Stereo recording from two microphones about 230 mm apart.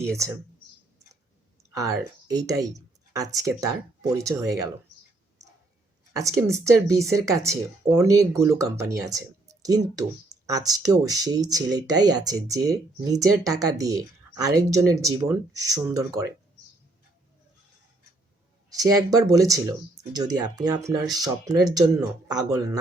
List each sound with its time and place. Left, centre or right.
1.7 s speech: centre
6.1 s speech: centre
18.7 s speech: centre